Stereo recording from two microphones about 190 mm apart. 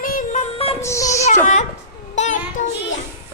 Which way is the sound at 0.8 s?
15° left (ahead or behind).